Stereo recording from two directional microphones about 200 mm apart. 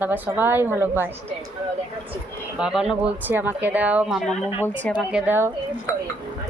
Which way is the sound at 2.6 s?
Centre (ahead or behind).